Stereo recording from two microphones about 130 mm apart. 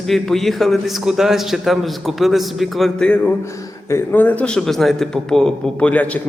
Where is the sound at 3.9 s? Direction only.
15° left (ahead or behind).